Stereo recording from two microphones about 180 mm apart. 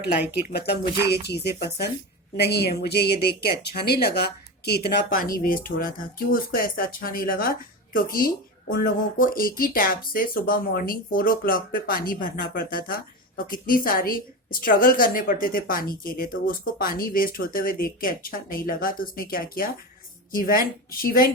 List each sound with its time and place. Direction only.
0.4 s speech: 65° left (ahead or behind)
5.1 s speech: 50° left (ahead or behind)